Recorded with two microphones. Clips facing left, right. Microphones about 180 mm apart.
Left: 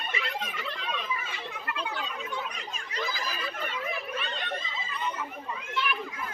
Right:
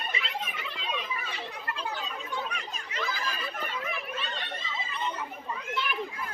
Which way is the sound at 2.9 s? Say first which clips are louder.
Even; 35° left (ahead or behind).